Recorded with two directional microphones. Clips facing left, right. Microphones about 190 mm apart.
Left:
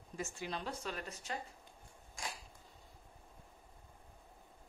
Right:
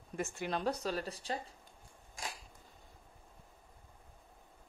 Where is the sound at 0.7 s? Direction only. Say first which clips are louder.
Right 7 dB; 40° right (ahead or behind).